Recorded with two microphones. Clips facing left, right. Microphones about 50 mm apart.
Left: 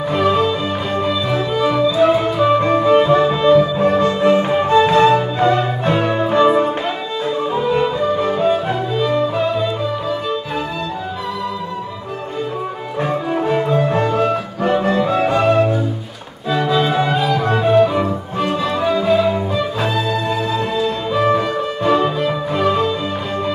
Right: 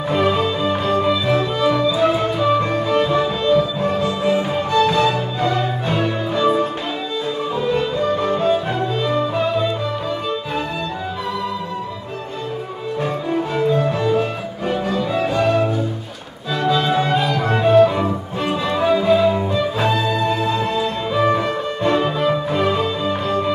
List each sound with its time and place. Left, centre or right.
0.1 s music: centre
2.4 s music: centre
7.6 s music: centre
13.0 s cello: left
14.2 s music: left
15.4 s music: left
16.5 s music: centre